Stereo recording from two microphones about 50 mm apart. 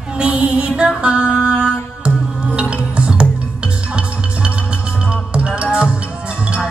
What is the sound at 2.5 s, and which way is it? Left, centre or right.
Music, right.